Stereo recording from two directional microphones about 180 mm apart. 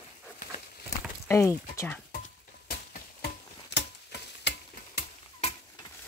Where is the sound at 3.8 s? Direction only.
70° left (ahead or behind).